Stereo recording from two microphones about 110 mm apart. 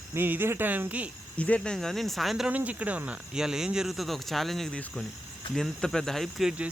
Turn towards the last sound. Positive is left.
turn(degrees=-5)  # may be behind; listen again after turning